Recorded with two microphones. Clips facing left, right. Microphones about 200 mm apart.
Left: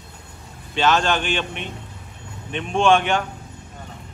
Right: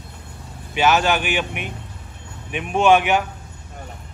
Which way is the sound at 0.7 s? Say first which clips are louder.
Right 1 dB; 10° right (ahead or behind).